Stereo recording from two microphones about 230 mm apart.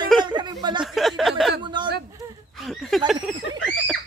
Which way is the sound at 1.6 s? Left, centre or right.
Centre.